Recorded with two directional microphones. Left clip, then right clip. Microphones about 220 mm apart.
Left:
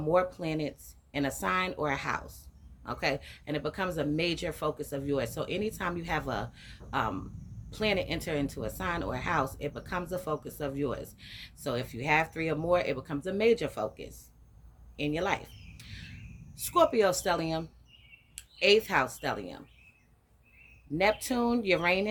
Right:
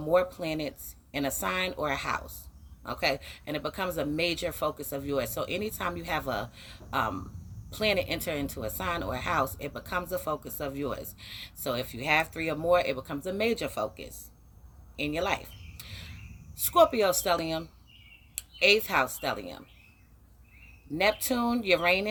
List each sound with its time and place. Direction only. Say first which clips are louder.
0.1 s a woman's voice: right 2 dB; 10° right (ahead or behind)
21.0 s speech: right 1 dB; 10° right (ahead or behind)